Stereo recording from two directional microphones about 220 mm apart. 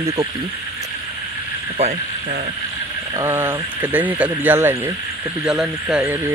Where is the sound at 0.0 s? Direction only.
15° right (ahead or behind).